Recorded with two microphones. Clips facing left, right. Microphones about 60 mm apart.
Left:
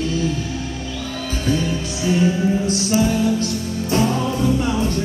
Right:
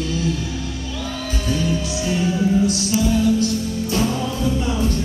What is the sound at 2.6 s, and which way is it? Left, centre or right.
Music, left.